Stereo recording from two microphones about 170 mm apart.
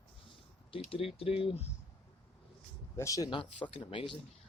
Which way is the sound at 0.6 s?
30° left (ahead or behind).